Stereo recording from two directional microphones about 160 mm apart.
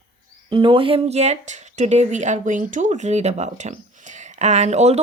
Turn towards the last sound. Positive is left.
turn(degrees=-45)  # may be behind; listen again after turning